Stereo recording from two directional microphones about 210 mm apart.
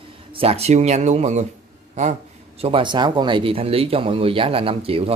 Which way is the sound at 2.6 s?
25° right (ahead or behind).